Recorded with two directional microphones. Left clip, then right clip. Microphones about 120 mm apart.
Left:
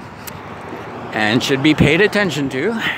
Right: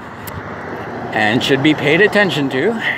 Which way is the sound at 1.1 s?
40° left (ahead or behind).